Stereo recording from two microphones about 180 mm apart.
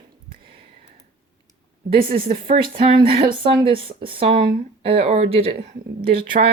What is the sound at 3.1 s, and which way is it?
Speech, 55° right (ahead or behind).